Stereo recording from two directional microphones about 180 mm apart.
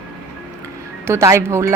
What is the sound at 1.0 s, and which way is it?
Speech, 15° right (ahead or behind).